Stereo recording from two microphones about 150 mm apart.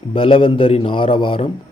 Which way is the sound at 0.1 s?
35° left (ahead or behind).